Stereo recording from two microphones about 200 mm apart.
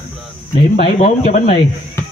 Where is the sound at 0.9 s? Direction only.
35° left (ahead or behind).